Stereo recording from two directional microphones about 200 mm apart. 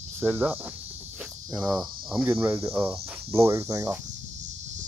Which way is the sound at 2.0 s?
5° right (ahead or behind).